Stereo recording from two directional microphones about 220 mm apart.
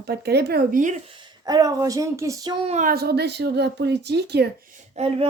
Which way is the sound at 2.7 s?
40° right (ahead or behind).